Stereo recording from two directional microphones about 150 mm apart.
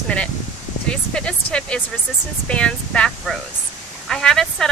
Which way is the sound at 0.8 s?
5° left (ahead or behind).